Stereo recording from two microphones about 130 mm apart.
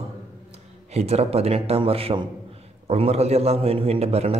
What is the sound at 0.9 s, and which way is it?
A man's voice, 55° right (ahead or behind).